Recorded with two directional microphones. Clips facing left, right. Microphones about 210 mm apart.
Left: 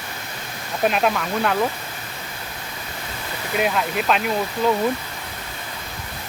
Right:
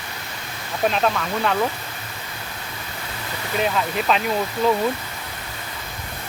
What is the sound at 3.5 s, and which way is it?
Speech, 5° left (ahead or behind).